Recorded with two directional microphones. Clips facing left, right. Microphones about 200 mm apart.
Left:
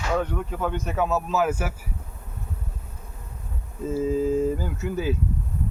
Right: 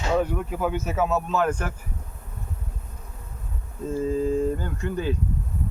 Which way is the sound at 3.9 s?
5° left (ahead or behind).